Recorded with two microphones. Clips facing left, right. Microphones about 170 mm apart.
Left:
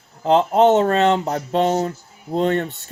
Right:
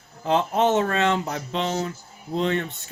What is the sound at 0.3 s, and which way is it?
Speech, 35° left (ahead or behind).